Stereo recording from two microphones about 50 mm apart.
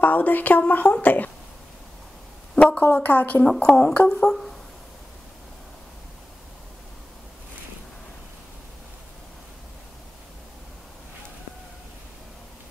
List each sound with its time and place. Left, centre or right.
0.0 s speech: left
2.5 s a sound: centre
2.8 s speech: left
3.4 s speech: centre
3.7 s speech: left
4.1 s speech: centre